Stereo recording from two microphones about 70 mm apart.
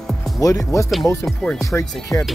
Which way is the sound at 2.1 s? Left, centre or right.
Left.